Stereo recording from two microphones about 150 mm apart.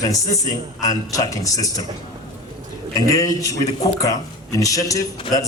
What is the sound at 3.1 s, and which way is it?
A man's voice, 20° left (ahead or behind).